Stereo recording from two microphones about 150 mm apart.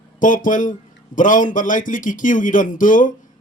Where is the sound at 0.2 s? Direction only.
60° left (ahead or behind).